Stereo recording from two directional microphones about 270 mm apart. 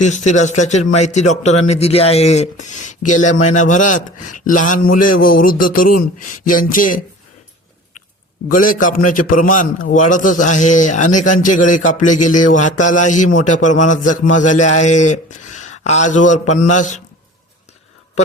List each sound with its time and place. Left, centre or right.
0.0 s a man's voice: left
4.9 s a sound: left
5.2 s speech: left
8.4 s a man's voice: left